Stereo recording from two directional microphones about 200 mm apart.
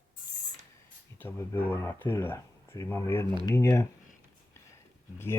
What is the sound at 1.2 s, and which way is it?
Speech, 10° left (ahead or behind).